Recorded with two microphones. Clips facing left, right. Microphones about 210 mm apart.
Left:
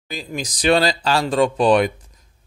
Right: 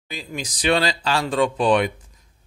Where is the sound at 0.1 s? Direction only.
40° left (ahead or behind).